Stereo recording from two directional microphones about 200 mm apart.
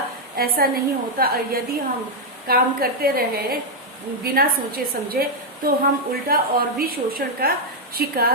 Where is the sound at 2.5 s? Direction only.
50° right (ahead or behind).